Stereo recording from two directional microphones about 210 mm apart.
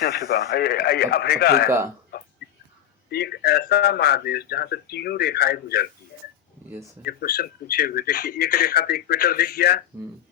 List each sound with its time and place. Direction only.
0.0 s speech: 45° left (ahead or behind)
2.1 s a sound: 50° left (ahead or behind)
3.1 s speech: 50° left (ahead or behind)
7.0 s speech: 45° left (ahead or behind)